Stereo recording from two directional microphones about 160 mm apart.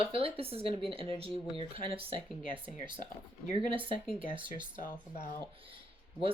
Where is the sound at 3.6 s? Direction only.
35° right (ahead or behind).